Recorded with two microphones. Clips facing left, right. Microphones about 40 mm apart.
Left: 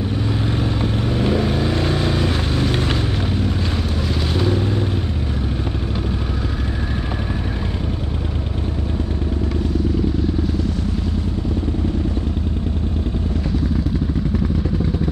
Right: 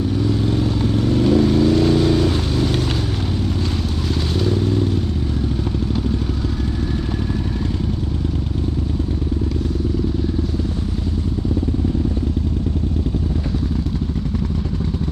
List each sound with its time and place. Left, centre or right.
0.3 s vehicle: left
4.4 s vehicle: left